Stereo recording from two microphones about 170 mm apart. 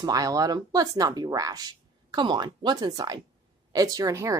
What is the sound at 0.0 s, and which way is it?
Speech, 20° right (ahead or behind).